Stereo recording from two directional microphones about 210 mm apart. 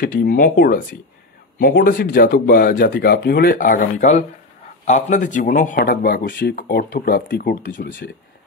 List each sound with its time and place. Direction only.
0.0 s speech: 45° left (ahead or behind)